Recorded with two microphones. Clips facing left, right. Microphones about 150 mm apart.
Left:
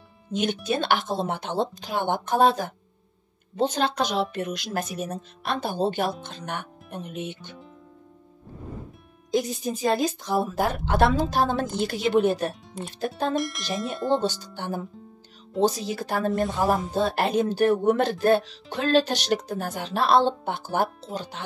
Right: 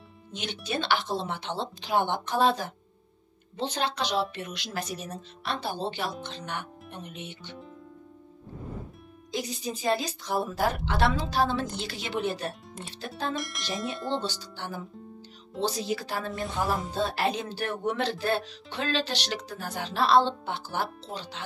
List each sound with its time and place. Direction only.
0.3 s a woman's voice: 50° left (ahead or behind)
9.3 s a woman's voice: 50° left (ahead or behind)
13.3 s speech: centre (ahead or behind)
14.0 s a woman's voice: 50° left (ahead or behind)